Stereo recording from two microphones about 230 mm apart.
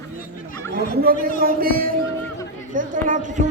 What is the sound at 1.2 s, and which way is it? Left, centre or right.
A man's voice, right.